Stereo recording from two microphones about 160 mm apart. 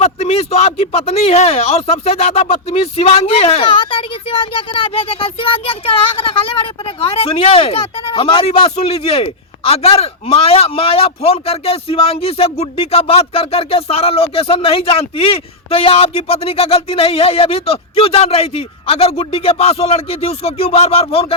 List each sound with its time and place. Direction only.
0.0 s speech: 40° left (ahead or behind)